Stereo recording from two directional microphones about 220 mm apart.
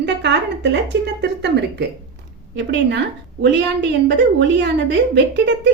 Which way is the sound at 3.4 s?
50° right (ahead or behind).